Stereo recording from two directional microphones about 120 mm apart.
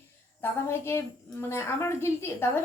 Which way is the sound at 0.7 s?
20° left (ahead or behind).